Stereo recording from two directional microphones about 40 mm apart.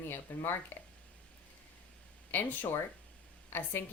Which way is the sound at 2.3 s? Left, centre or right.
Left.